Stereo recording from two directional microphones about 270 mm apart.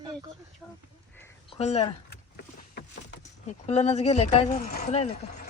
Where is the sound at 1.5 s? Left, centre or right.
Left.